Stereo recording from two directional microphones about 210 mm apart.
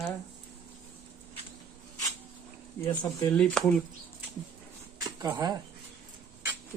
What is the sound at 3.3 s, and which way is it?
Speech, 5° left (ahead or behind).